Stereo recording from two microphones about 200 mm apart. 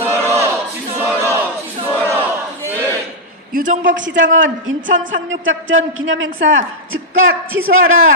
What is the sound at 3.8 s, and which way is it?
A man's voice, 65° right (ahead or behind).